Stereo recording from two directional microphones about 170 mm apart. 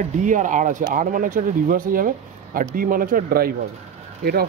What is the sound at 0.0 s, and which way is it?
A man's voice, 50° right (ahead or behind).